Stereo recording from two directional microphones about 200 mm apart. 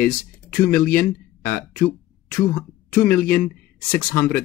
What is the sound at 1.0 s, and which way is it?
Speech, 10° left (ahead or behind).